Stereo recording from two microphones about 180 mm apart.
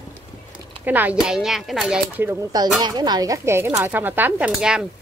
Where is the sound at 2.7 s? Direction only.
25° right (ahead or behind).